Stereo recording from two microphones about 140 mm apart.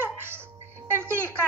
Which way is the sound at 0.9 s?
15° right (ahead or behind).